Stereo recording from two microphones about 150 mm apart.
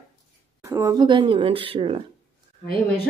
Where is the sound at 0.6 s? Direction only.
20° right (ahead or behind).